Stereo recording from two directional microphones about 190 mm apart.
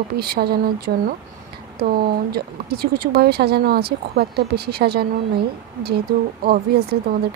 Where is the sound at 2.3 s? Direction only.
55° right (ahead or behind).